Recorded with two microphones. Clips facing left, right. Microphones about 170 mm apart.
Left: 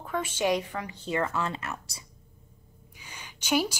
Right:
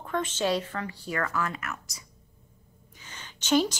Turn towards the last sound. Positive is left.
turn(degrees=10)  # may be behind; listen again after turning